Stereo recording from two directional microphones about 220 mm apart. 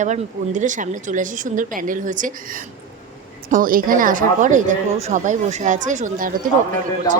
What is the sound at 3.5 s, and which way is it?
A woman's voice, 40° right (ahead or behind).